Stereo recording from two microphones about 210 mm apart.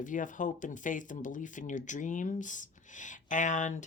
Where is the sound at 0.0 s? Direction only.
40° left (ahead or behind).